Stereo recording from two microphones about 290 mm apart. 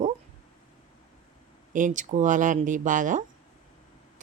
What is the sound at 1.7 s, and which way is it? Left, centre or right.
A woman's voice, right.